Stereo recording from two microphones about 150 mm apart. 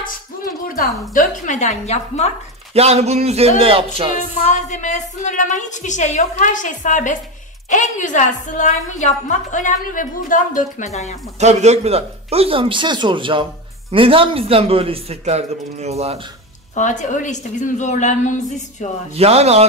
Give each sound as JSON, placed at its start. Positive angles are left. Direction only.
{"t": 0.7, "sound": "a woman's voice", "side_deg": 70}
{"t": 2.7, "sound": "a man's voice", "side_deg": -45}
{"t": 4.1, "sound": "a woman's voice", "side_deg": 50}
{"t": 11.3, "sound": "a man's voice", "side_deg": -50}
{"t": 16.7, "sound": "a woman's voice", "side_deg": 55}
{"t": 19.1, "sound": "a man's voice", "side_deg": -45}